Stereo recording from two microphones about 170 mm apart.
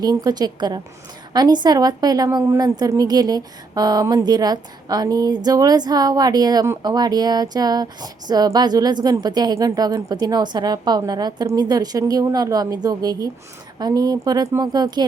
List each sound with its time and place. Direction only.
0.0 s a woman's voice: 20° right (ahead or behind)